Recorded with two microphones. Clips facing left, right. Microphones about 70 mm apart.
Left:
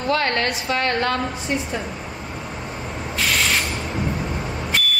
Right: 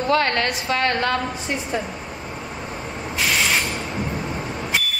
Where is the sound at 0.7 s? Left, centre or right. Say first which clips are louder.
Right 1 dB; right.